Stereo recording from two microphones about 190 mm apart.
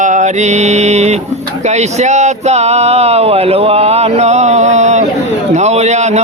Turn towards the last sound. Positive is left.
turn(degrees=-35)  # may be behind; listen again after turning